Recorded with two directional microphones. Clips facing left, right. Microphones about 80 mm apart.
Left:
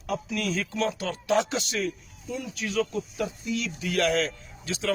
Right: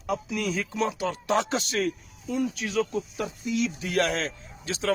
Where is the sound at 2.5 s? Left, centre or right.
Right.